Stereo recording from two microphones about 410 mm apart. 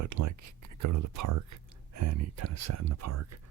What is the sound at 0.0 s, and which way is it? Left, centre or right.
Speech, right.